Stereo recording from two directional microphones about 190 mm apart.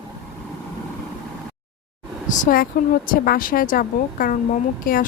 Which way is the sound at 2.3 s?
45° left (ahead or behind).